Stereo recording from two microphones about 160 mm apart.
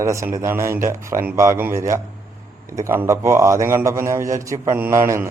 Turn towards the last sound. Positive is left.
turn(degrees=-15)  # may be behind; listen again after turning